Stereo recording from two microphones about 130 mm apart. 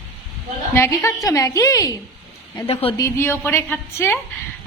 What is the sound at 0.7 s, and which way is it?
A woman's voice, 20° left (ahead or behind).